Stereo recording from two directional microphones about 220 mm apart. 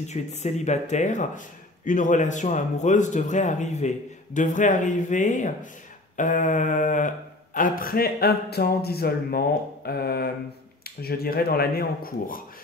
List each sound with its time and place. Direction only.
0.1 s a man's voice: 30° left (ahead or behind)